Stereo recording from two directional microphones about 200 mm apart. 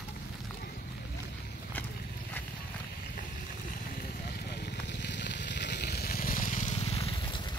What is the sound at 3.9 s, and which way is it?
Fire, 50° left (ahead or behind).